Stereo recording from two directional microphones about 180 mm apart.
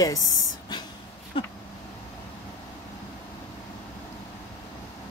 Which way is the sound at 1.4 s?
30° left (ahead or behind).